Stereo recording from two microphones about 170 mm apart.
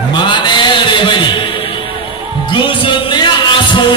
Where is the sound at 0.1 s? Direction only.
25° left (ahead or behind).